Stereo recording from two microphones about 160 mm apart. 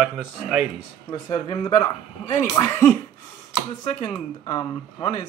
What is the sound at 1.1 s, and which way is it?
Speech, 25° left (ahead or behind).